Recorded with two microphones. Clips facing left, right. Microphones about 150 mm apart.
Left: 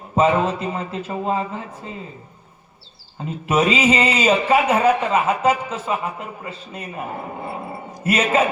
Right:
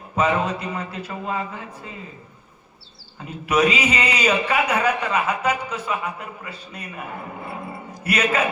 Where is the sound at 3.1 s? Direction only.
30° left (ahead or behind).